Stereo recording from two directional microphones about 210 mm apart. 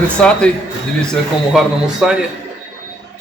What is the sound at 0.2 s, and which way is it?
Speech, 5° left (ahead or behind).